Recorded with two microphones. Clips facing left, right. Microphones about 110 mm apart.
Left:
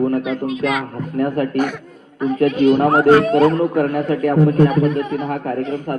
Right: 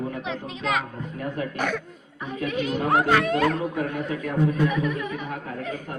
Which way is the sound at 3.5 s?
60° left (ahead or behind).